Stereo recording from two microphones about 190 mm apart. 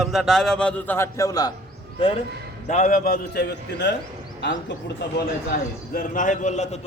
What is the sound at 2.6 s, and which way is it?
A man's voice, 40° left (ahead or behind).